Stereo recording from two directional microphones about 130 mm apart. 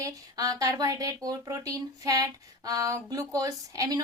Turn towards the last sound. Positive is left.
turn(degrees=-25)  # may be behind; listen again after turning